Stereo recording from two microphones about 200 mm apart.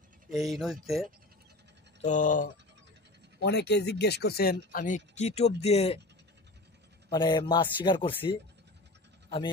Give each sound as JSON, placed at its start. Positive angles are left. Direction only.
{"t": 0.3, "sound": "speech", "side_deg": 0}
{"t": 2.0, "sound": "speech", "side_deg": 40}
{"t": 3.3, "sound": "speech", "side_deg": 55}
{"t": 4.7, "sound": "speech", "side_deg": 40}
{"t": 7.1, "sound": "a man's voice", "side_deg": 20}